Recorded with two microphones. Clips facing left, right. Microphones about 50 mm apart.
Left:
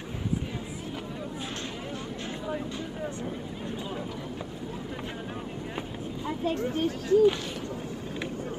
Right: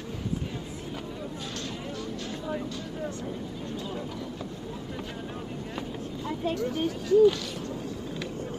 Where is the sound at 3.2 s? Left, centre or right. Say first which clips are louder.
Even; left.